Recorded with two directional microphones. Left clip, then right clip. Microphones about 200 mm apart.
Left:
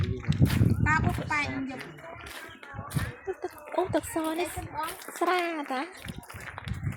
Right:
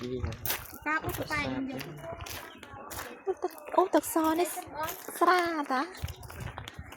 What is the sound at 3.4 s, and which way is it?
Speech, 15° right (ahead or behind).